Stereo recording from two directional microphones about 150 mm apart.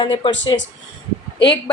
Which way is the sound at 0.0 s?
35° left (ahead or behind).